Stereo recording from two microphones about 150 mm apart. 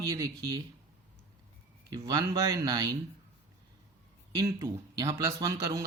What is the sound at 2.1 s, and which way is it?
Speech, 25° right (ahead or behind).